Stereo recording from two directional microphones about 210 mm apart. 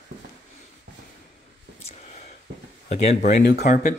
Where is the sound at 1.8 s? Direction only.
35° left (ahead or behind).